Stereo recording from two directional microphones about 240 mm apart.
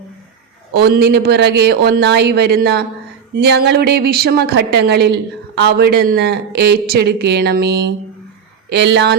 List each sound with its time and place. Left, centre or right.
0.7 s speech: right